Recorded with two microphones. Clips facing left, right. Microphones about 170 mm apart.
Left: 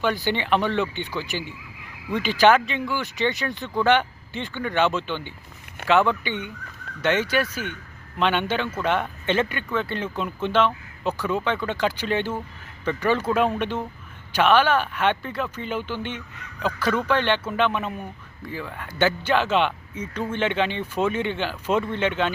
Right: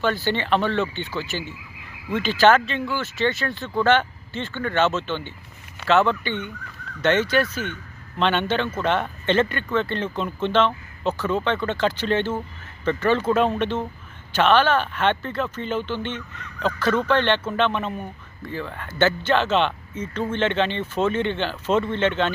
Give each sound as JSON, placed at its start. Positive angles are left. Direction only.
{"t": 0.0, "sound": "speech", "side_deg": 15}